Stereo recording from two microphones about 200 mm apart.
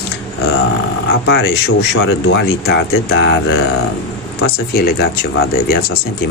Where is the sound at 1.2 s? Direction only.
55° left (ahead or behind).